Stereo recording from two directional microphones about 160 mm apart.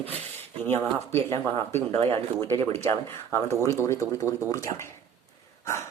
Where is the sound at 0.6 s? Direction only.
15° left (ahead or behind).